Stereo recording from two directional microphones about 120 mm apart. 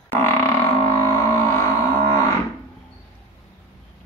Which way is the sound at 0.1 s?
20° left (ahead or behind).